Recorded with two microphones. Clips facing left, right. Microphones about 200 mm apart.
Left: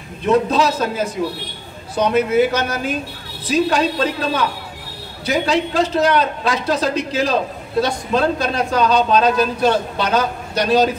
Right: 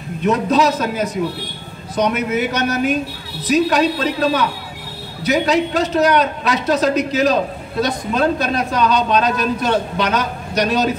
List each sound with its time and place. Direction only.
0.5 s a man's voice: 30° left (ahead or behind)